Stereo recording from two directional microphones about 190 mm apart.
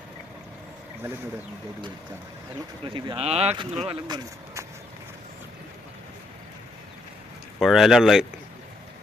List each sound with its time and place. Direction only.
2.8 s speech: 25° right (ahead or behind)
7.6 s speech: centre (ahead or behind)